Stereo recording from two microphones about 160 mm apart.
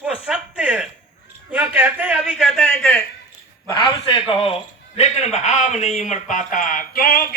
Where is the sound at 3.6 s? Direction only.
25° left (ahead or behind).